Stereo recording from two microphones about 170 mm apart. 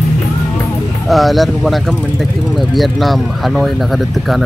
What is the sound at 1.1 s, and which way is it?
Speech, centre (ahead or behind).